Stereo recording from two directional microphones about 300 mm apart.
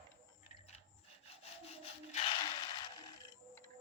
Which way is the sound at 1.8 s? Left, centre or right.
Centre.